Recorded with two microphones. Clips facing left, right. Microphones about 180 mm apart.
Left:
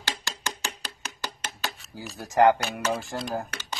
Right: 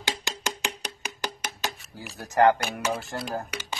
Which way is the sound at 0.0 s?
15° right (ahead or behind).